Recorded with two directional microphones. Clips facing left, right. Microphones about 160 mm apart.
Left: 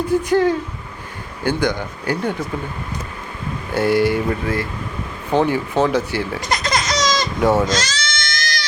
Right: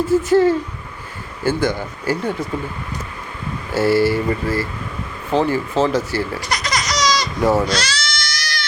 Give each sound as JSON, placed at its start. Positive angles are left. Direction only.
{"t": 0.0, "sound": "speech", "side_deg": -5}
{"t": 3.7, "sound": "speech", "side_deg": -5}
{"t": 6.8, "sound": "baby laughter", "side_deg": 50}
{"t": 7.3, "sound": "speech", "side_deg": 0}
{"t": 7.7, "sound": "goat", "side_deg": 45}